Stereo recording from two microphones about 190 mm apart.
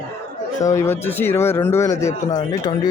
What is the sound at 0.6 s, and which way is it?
Speech, 15° left (ahead or behind).